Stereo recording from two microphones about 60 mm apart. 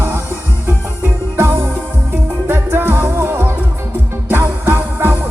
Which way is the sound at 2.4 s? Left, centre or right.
Right.